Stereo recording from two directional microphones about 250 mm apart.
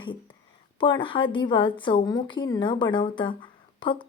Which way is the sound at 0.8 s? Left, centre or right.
Centre.